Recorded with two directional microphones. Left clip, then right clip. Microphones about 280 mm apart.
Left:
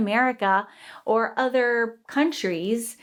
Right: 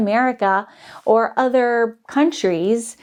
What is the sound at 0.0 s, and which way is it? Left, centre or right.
A woman's voice, right.